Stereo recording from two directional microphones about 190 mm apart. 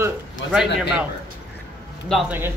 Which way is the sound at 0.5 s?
5° right (ahead or behind).